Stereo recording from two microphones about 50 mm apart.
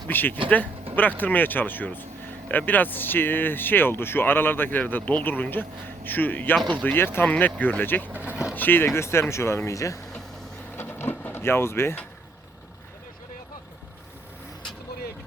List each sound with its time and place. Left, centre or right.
0.1 s speech: left
7.3 s speech: left
8.1 s speech: right
8.5 s speech: left
9.0 s speech: left
10.8 s a sound: left